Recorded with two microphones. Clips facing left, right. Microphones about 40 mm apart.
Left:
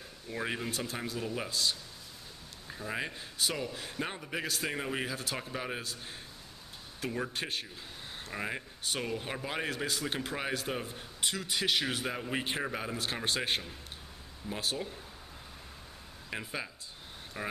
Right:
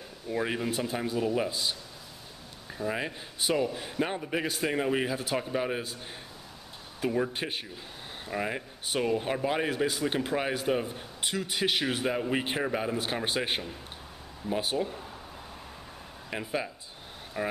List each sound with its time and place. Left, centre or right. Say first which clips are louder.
0.3 s speech: right 5 dB; centre
0.7 s a man's voice: right 6 dB; right
3.3 s a man's voice: right 7 dB; centre
7.1 s a man's voice: right 6 dB; centre
9.8 s a man's voice: right 6 dB; centre
12.9 s a man's voice: right 4 dB; right
14.5 s speech: right 8 dB; right
16.3 s a man's voice: right 6 dB; centre